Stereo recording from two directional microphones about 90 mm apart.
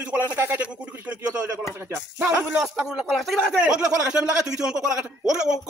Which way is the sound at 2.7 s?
5° right (ahead or behind).